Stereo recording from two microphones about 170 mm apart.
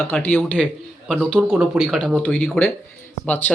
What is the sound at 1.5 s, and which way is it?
Speech, 5° right (ahead or behind).